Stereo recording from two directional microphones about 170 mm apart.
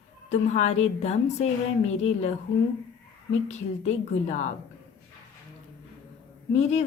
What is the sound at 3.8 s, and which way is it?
Speech, 45° left (ahead or behind).